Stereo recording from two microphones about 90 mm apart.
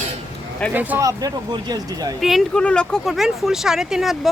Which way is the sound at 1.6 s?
45° right (ahead or behind).